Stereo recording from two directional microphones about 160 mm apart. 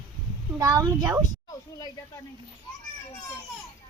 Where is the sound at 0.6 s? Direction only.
25° right (ahead or behind).